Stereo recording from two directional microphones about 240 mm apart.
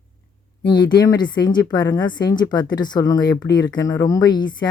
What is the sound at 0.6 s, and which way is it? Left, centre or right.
Speech, centre.